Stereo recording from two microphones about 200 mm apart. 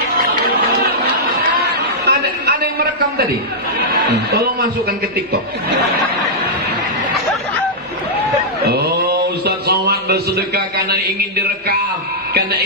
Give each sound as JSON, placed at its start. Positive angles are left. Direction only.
{"t": 2.0, "sound": "a sound", "side_deg": -55}
{"t": 4.1, "sound": "a man's voice", "side_deg": -50}
{"t": 8.6, "sound": "a man's voice", "side_deg": -55}